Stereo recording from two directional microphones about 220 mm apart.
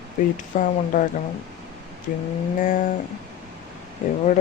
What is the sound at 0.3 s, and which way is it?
Speech, 35° left (ahead or behind).